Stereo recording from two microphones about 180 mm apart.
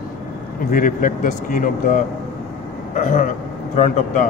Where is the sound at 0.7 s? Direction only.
50° left (ahead or behind).